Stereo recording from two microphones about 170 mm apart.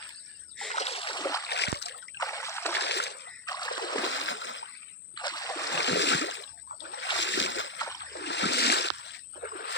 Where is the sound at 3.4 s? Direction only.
25° left (ahead or behind).